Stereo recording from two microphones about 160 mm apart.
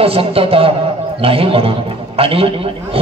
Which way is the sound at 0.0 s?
35° right (ahead or behind).